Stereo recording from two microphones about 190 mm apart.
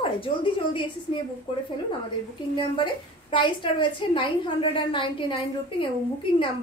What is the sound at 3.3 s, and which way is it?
A woman's voice, 25° left (ahead or behind).